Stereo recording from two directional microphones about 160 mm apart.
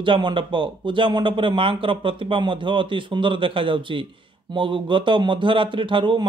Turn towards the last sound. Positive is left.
turn(degrees=-30)  # may be behind; listen again after turning